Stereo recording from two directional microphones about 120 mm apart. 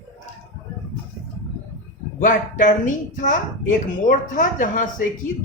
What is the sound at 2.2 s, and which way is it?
Speech, 90° left.